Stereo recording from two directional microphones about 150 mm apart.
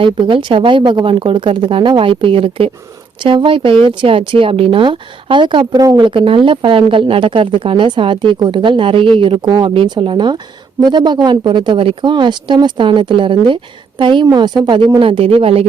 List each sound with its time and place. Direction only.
0.0 s speech: 35° right (ahead or behind)